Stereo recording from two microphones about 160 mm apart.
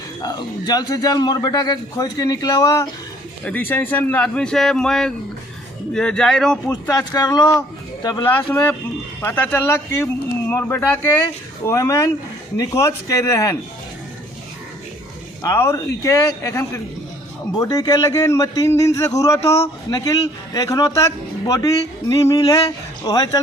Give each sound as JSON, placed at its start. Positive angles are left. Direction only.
{"t": 0.2, "sound": "a man's voice", "side_deg": 25}
{"t": 3.4, "sound": "a man's voice", "side_deg": 10}
{"t": 6.7, "sound": "a man's voice", "side_deg": 25}
{"t": 15.4, "sound": "a man's voice", "side_deg": 20}